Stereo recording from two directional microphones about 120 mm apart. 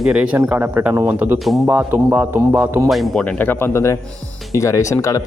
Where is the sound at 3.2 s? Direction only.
15° left (ahead or behind).